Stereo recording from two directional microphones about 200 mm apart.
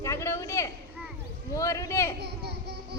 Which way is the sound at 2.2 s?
55° right (ahead or behind).